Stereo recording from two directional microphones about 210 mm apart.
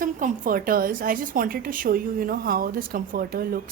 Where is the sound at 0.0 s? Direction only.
40° right (ahead or behind).